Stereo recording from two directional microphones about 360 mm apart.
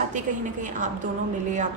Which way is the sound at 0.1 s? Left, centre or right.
Right.